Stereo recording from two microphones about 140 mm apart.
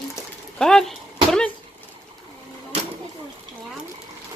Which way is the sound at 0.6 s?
5° left (ahead or behind).